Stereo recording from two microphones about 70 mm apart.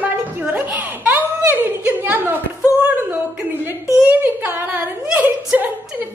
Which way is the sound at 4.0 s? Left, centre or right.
Right.